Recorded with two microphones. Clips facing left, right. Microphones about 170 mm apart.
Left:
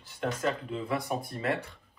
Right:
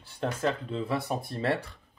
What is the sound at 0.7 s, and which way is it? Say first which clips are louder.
Speech: right 1 dB; 30° right (ahead or behind).